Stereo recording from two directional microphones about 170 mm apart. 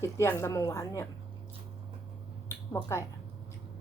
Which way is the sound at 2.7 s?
15° left (ahead or behind).